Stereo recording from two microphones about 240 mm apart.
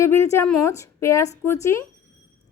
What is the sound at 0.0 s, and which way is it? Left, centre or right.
A woman's voice, centre.